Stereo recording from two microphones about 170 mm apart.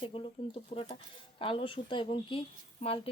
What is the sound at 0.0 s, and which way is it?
A woman's voice, 30° left (ahead or behind).